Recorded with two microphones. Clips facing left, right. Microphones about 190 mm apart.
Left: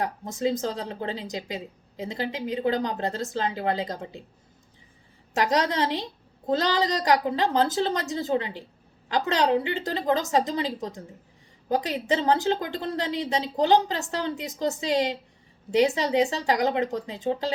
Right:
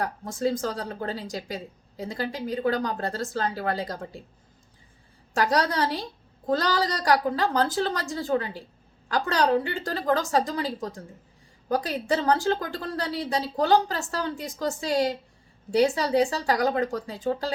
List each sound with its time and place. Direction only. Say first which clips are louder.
0.0 s a woman's voice: even; 20° left (ahead or behind)
5.3 s a woman's voice: even; 20° left (ahead or behind)